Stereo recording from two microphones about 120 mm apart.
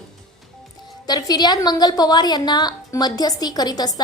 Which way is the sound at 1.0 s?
35° left (ahead or behind).